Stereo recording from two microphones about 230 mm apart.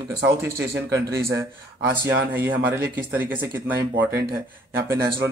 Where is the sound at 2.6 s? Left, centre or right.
Centre.